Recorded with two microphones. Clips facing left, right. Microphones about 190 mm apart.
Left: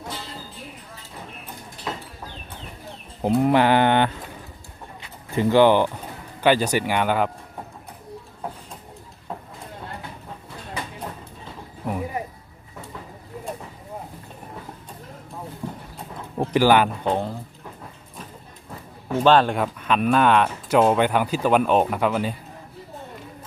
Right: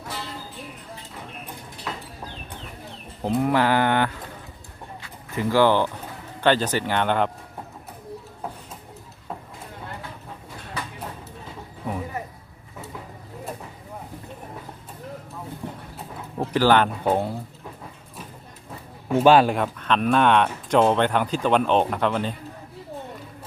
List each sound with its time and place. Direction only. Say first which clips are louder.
1.9 s a sound: left 2 dB; 20° left (ahead or behind)
3.2 s speech: left 3 dB; 20° left (ahead or behind)
5.3 s speech: left 3 dB; 25° left (ahead or behind); by 7.3 s 5° left (ahead or behind)
16.4 s a sound: left 1 dB; 10° left (ahead or behind)
17.0 s speech: right 1 dB; 10° right (ahead or behind)
19.0 s speech: right 1 dB; 10° right (ahead or behind); by 22.4 s 10° left (ahead or behind)